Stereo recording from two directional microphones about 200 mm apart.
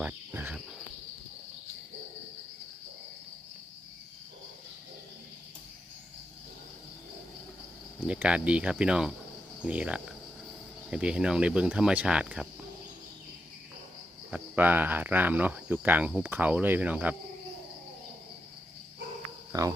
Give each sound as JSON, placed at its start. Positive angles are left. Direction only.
{"t": 0.0, "sound": "cricket", "side_deg": -10}
{"t": 7.9, "sound": "speech", "side_deg": -5}
{"t": 14.3, "sound": "speech", "side_deg": -5}
{"t": 19.5, "sound": "speech", "side_deg": -15}